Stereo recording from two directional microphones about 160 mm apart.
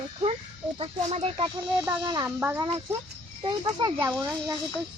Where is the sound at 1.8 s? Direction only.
25° right (ahead or behind).